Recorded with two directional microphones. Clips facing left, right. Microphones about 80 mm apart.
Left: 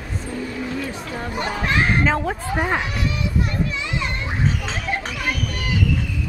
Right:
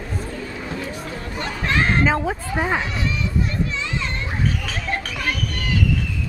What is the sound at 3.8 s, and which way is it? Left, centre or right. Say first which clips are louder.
Children playing: left 1 dB; centre.